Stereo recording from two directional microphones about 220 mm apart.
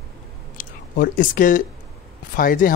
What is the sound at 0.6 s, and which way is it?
Speech, 40° left (ahead or behind).